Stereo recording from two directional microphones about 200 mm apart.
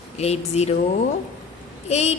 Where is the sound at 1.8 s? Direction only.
35° left (ahead or behind).